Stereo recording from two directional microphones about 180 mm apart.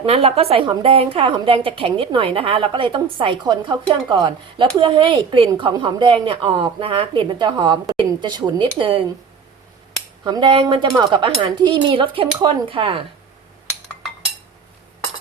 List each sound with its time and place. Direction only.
0.0 s a woman's voice: 35° right (ahead or behind)
10.2 s a woman's voice: 25° right (ahead or behind)